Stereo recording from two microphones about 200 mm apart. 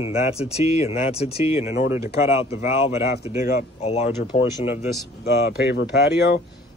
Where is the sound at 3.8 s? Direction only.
35° left (ahead or behind).